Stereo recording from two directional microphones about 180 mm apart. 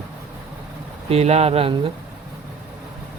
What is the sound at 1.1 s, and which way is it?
Speech, 35° right (ahead or behind).